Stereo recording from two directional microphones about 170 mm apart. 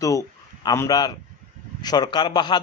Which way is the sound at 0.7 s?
20° left (ahead or behind).